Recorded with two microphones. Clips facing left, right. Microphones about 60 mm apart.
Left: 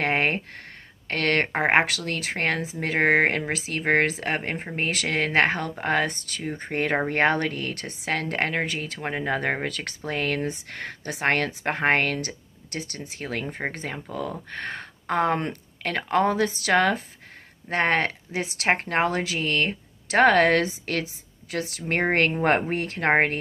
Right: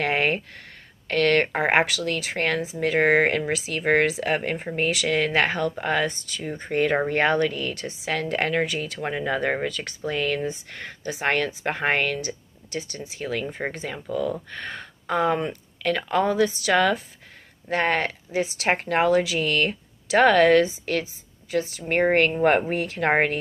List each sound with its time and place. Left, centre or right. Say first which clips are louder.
0.0 s a sound: right 1 dB; left
1.0 s a woman's voice: right 3 dB; left
9.4 s speech: right 2 dB; left
15.9 s a woman's voice: even; left
18.7 s speech: right 2 dB; left
22.7 s a woman's voice: right 1 dB; left